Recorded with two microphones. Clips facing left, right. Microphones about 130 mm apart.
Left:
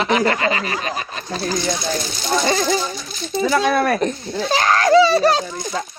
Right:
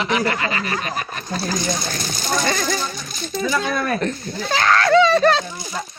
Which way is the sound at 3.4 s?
70° left (ahead or behind).